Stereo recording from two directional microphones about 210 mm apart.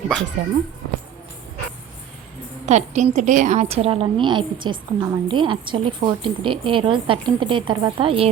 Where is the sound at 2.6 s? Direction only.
35° right (ahead or behind).